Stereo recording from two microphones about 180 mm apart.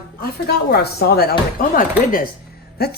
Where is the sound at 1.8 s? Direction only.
50° left (ahead or behind).